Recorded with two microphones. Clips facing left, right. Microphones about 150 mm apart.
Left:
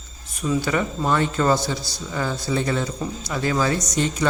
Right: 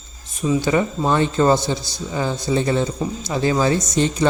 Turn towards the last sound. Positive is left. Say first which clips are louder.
# right 4 dB
turn(degrees=-25)  # may be behind; listen again after turning